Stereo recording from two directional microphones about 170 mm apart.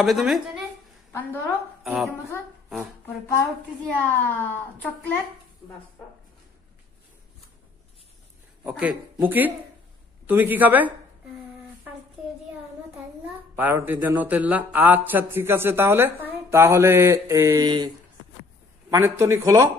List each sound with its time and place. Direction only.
0.0 s a woman's voice: centre (ahead or behind)
1.8 s a woman's voice: centre (ahead or behind)
3.8 s a child's voice: 10° left (ahead or behind)
8.6 s speech: 10° right (ahead or behind)
13.6 s speech: 10° right (ahead or behind); by 17.9 s 25° right (ahead or behind)
18.9 s speech: 15° right (ahead or behind)